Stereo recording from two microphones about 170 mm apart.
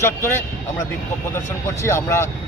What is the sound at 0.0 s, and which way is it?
A man's voice, 15° left (ahead or behind).